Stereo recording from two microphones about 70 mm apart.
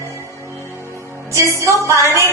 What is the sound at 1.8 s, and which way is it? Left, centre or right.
Music, right.